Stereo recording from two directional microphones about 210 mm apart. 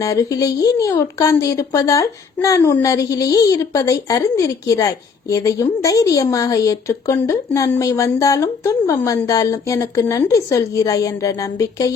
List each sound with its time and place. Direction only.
0.0 s a woman's voice: 15° left (ahead or behind)